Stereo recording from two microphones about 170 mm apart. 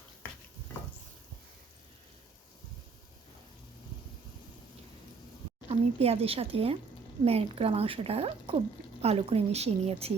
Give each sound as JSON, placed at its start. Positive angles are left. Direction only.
{"t": 5.6, "sound": "speech", "side_deg": -35}